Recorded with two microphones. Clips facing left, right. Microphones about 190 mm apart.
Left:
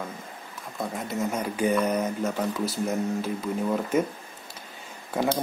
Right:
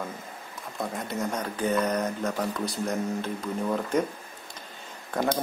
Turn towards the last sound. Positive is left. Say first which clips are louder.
# left 1 dB
turn(degrees=5)  # may be behind; listen again after turning